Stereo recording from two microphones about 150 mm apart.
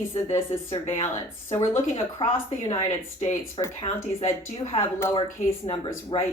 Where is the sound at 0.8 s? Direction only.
40° left (ahead or behind).